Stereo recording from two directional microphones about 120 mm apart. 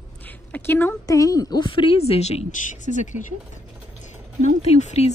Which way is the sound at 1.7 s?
45° left (ahead or behind).